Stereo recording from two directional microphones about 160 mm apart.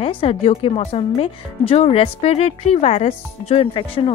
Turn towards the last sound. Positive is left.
turn(degrees=35)  # may be behind; listen again after turning